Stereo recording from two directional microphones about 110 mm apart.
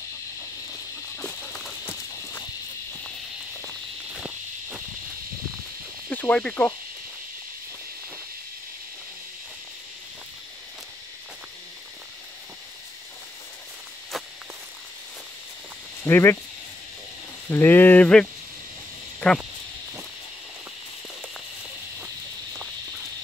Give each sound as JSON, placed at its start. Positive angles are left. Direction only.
{"t": 1.1, "sound": "a sound", "side_deg": 10}
{"t": 4.1, "sound": "walk", "side_deg": -10}
{"t": 6.0, "sound": "cricket", "side_deg": 15}
{"t": 16.0, "sound": "speech", "side_deg": 20}
{"t": 17.5, "sound": "speech", "side_deg": 20}
{"t": 19.1, "sound": "a sound", "side_deg": 5}